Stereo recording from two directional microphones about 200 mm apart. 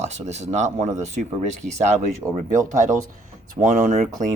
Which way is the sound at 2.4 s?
40° right (ahead or behind).